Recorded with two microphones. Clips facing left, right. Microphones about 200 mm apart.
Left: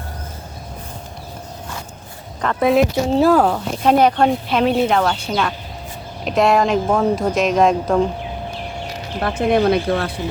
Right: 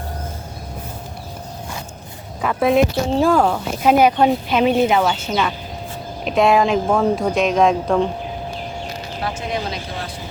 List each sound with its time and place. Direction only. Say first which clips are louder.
2.4 s speech: even; 5° right (ahead or behind)
3.8 s speech: even; 5° right (ahead or behind)
9.2 s speech: left 10 dB; 60° left (ahead or behind)